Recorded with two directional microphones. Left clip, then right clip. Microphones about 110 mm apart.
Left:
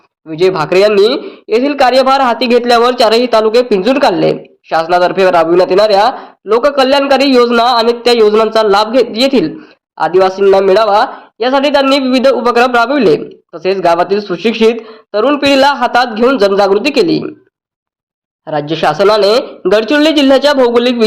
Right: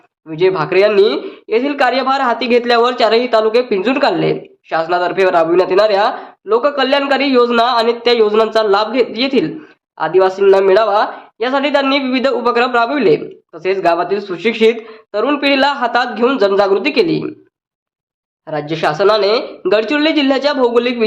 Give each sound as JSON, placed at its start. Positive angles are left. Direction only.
{"t": 0.3, "sound": "speech", "side_deg": 35}
{"t": 18.4, "sound": "speech", "side_deg": 45}